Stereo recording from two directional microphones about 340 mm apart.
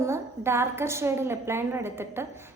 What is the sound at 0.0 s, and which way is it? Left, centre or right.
A woman's voice, centre.